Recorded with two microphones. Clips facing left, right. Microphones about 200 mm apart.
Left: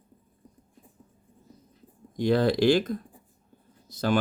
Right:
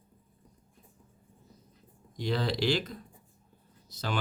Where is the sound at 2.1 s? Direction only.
50° left (ahead or behind).